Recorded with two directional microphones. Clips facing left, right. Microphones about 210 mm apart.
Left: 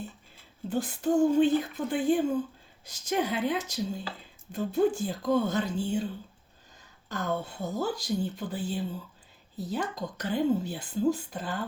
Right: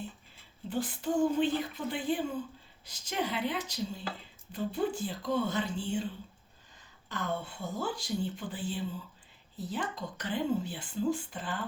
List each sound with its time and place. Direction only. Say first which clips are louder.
0.7 s speech: left 5 dB; 45° left (ahead or behind)
7.1 s a woman's voice: left 4 dB; 40° left (ahead or behind)